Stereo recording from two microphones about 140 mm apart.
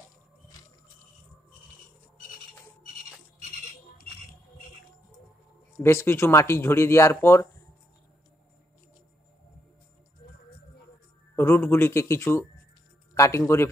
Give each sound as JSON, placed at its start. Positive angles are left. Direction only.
{"t": 5.8, "sound": "speech", "side_deg": 20}
{"t": 11.3, "sound": "speech", "side_deg": 15}